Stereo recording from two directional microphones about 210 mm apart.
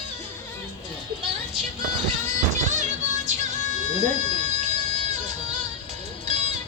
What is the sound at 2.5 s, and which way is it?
Music, 35° right (ahead or behind).